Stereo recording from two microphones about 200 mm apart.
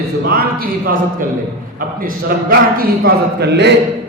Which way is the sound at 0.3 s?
50° right (ahead or behind).